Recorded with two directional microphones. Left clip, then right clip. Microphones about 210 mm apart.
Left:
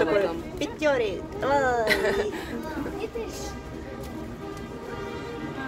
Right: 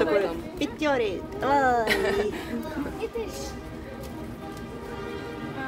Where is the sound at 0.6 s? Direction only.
25° right (ahead or behind).